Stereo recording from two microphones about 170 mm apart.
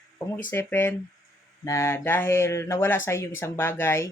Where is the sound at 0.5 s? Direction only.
15° left (ahead or behind).